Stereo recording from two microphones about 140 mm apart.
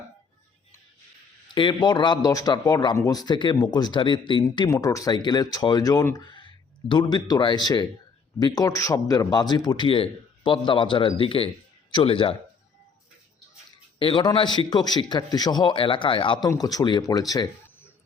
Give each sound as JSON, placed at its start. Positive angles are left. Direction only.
{"t": 1.5, "sound": "a man's voice", "side_deg": 30}
{"t": 4.7, "sound": "a man's voice", "side_deg": 25}
{"t": 14.0, "sound": "a man's voice", "side_deg": 35}